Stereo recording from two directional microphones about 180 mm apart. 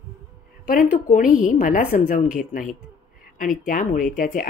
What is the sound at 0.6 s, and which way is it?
A woman's voice, 50° left (ahead or behind).